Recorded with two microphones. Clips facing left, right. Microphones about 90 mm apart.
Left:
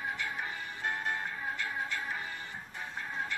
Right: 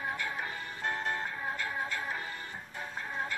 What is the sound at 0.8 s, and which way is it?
Music, 40° right (ahead or behind).